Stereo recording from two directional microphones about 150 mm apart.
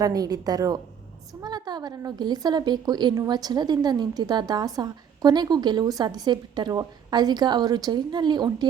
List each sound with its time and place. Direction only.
0.0 s a woman's voice: 25° right (ahead or behind)